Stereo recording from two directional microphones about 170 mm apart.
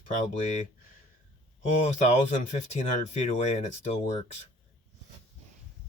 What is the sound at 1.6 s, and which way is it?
Speech, 45° left (ahead or behind).